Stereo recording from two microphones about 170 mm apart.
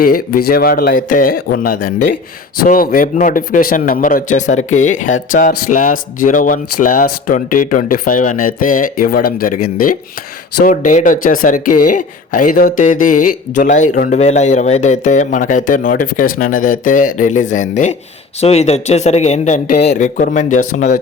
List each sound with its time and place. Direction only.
0.0 s a man's voice: 60° left (ahead or behind)